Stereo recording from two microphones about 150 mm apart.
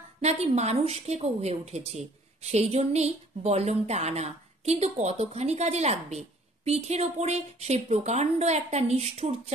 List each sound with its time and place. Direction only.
0.2 s speech: 45° right (ahead or behind)